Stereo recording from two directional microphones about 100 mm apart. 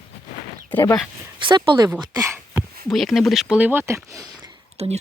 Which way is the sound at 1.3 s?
55° right (ahead or behind).